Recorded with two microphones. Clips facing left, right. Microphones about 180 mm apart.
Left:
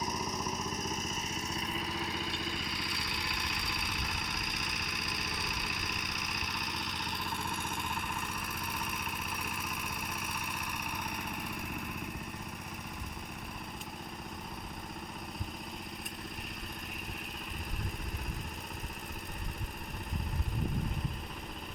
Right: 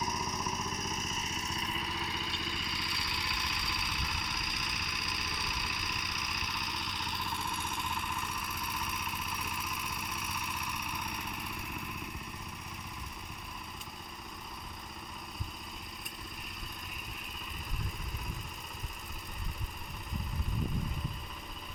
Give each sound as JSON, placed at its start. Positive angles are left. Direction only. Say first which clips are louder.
{"t": 0.9, "sound": "vehicle", "louder": "left 1 dB", "side_deg": 45}